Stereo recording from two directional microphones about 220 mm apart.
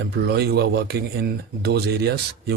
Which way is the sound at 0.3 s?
45° right (ahead or behind).